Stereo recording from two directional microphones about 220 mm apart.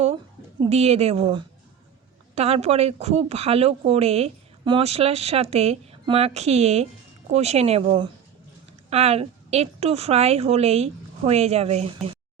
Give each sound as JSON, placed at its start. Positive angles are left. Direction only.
{"t": 0.6, "sound": "speech", "side_deg": -30}